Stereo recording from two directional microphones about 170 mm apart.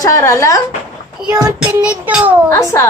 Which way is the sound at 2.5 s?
20° left (ahead or behind).